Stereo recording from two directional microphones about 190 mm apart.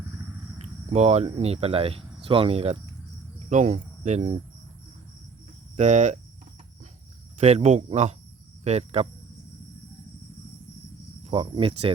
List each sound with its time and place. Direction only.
0.6 s speech: 35° right (ahead or behind)
5.7 s speech: 40° right (ahead or behind)
7.3 s speech: 35° right (ahead or behind)
11.2 s speech: 25° right (ahead or behind)